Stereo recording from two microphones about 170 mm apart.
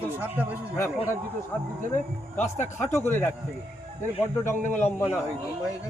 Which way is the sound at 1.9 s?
45° left (ahead or behind).